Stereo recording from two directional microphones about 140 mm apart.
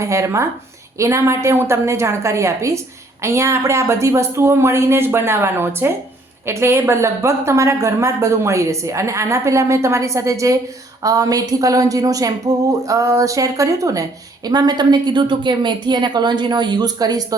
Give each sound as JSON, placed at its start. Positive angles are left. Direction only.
{"t": 0.0, "sound": "a woman's voice", "side_deg": -20}